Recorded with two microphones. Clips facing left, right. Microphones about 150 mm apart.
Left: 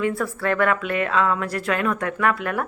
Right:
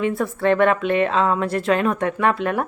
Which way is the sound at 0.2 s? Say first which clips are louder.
Right 4 dB; 25° right (ahead or behind).